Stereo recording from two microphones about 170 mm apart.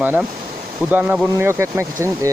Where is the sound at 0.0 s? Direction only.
10° right (ahead or behind).